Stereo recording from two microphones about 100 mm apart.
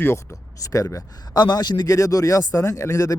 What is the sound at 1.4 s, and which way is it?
Speech, 45° left (ahead or behind).